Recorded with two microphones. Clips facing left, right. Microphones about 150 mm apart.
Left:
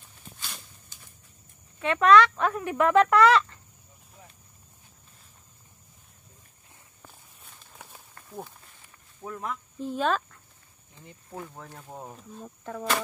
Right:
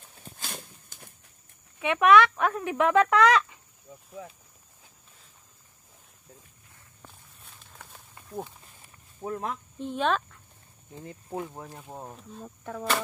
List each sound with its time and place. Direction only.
0.4 s a sound: 50° right (ahead or behind)
1.8 s speech: 10° right (ahead or behind)
7.1 s walk: centre (ahead or behind)
8.3 s speech: centre (ahead or behind)
9.2 s speech: 30° right (ahead or behind)
9.8 s speech: 5° left (ahead or behind)
11.2 s speech: 25° right (ahead or behind)
11.8 s speech: centre (ahead or behind)